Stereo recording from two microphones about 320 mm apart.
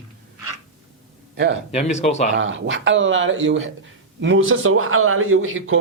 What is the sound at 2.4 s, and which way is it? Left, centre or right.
Speech, right.